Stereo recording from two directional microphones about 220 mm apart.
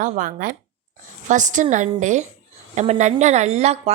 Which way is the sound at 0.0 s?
35° right (ahead or behind).